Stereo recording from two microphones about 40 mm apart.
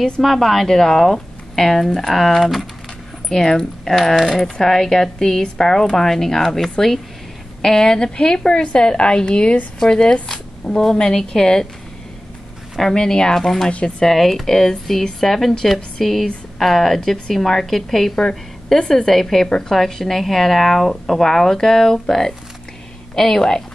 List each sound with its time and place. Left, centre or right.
0.2 s a woman's voice: centre
12.9 s speech: centre
14.1 s a woman's voice: centre